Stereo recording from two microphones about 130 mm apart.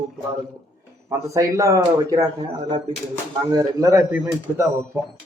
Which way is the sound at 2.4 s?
40° right (ahead or behind).